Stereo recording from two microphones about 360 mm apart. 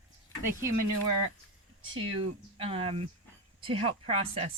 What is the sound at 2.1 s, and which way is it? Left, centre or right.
Speech, centre.